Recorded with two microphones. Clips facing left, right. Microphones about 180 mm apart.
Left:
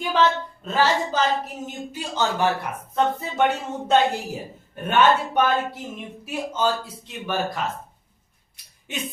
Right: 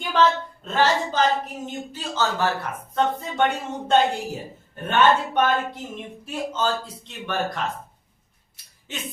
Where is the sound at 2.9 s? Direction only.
5° left (ahead or behind).